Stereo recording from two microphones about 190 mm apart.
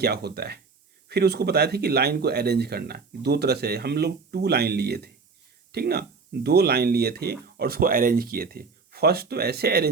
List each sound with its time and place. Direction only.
0.0 s speech: 60° right (ahead or behind)